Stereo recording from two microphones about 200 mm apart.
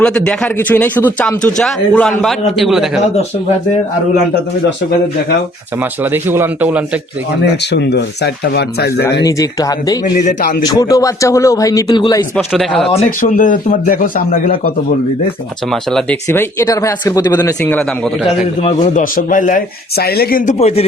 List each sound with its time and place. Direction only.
0.0 s speech: 5° left (ahead or behind)
6.0 s a man's voice: 10° right (ahead or behind)
7.7 s speech: 55° left (ahead or behind)
9.2 s speech: 15° left (ahead or behind)
10.2 s speech: 45° left (ahead or behind)
10.7 s speech: 20° left (ahead or behind)
12.5 s speech: centre (ahead or behind)
13.1 s speech: 40° left (ahead or behind)
15.7 s speech: centre (ahead or behind); by 17.5 s 20° left (ahead or behind)
17.6 s speech: 5° left (ahead or behind)
18.6 s a man's voice: 40° left (ahead or behind)